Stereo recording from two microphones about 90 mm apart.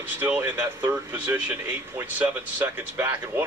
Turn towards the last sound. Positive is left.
turn(degrees=-25)  # may be behind; listen again after turning